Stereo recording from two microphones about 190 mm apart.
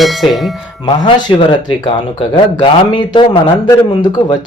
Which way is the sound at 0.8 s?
25° left (ahead or behind).